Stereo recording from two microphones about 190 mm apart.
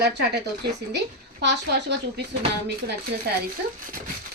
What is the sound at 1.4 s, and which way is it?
Speech, 65° right (ahead or behind).